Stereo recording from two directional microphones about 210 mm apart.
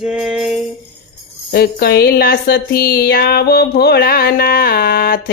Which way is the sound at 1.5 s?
50° left (ahead or behind).